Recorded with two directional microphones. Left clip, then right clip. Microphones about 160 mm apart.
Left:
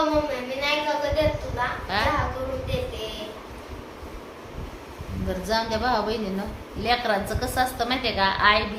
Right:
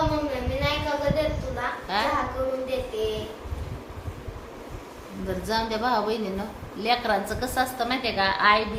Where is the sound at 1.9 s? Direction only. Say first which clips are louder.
Even; centre (ahead or behind).